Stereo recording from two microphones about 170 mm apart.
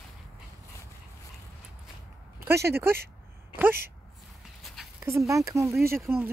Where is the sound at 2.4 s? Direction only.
15° right (ahead or behind).